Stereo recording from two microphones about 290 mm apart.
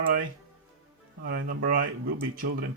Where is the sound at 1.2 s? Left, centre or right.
Right.